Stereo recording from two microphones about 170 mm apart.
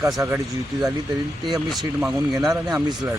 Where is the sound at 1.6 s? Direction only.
5° right (ahead or behind).